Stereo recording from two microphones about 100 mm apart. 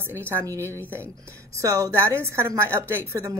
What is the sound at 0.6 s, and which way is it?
Speech, 25° left (ahead or behind).